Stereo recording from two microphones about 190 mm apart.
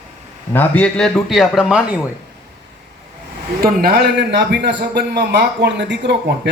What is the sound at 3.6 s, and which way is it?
A man's voice, 50° right (ahead or behind).